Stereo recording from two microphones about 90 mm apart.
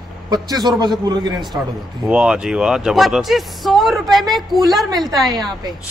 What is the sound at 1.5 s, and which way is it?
Speech, 30° right (ahead or behind).